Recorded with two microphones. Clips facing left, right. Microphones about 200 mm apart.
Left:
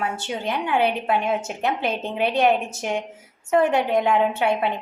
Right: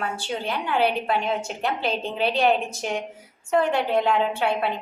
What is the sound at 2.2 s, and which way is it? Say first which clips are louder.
Speech: left 2 dB; 20° left (ahead or behind).